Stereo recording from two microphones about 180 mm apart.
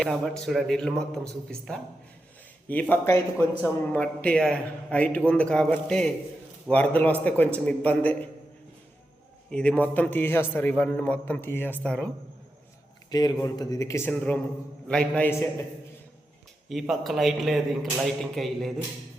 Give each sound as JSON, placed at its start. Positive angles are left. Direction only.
{"t": 0.0, "sound": "a man's voice", "side_deg": 5}
{"t": 9.5, "sound": "a man's voice", "side_deg": 5}
{"t": 13.1, "sound": "speech", "side_deg": 20}
{"t": 16.6, "sound": "a man's voice", "side_deg": 0}